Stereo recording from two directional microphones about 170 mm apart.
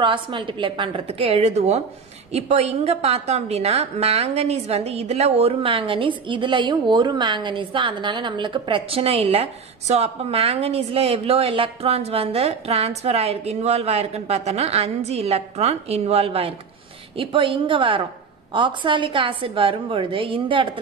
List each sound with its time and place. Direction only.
0.0 s a woman's voice: 30° right (ahead or behind)